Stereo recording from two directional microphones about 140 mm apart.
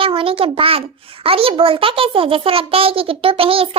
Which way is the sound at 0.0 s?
40° right (ahead or behind).